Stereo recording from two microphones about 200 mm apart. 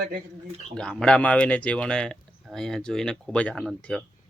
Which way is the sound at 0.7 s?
5° left (ahead or behind).